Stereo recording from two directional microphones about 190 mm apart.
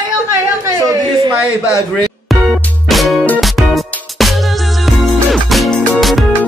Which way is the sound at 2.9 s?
Centre (ahead or behind).